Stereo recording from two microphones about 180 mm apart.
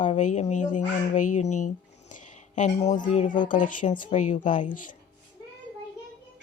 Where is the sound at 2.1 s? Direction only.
45° left (ahead or behind).